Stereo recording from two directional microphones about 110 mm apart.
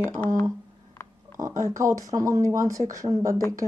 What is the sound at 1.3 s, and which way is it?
Speech, 30° right (ahead or behind).